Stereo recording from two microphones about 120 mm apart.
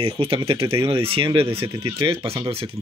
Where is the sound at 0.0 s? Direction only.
50° right (ahead or behind).